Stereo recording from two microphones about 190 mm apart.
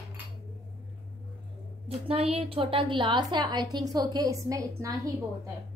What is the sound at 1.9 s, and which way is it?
A woman's voice, 30° right (ahead or behind).